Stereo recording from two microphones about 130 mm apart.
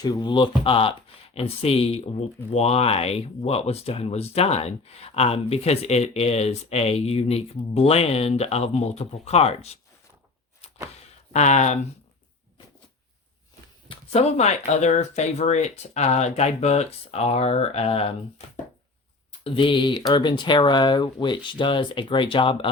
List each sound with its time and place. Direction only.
0.0 s speech: 35° left (ahead or behind); by 9.7 s 55° left (ahead or behind)
11.3 s speech: 65° left (ahead or behind)
13.8 s speech: 50° left (ahead or behind)
19.5 s speech: 40° left (ahead or behind)